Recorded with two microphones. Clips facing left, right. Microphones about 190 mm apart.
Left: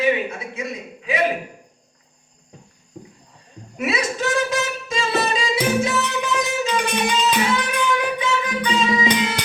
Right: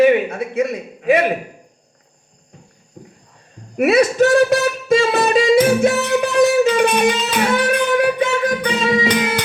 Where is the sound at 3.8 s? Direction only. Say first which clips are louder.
Right 11 dB; 60° right (ahead or behind).